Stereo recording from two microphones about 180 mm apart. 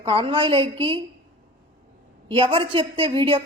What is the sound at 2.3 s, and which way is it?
A woman's voice, 30° right (ahead or behind).